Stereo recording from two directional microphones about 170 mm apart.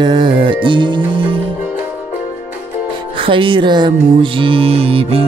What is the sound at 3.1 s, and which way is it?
Music, 30° right (ahead or behind).